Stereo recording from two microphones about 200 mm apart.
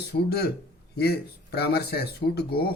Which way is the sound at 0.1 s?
55° left (ahead or behind).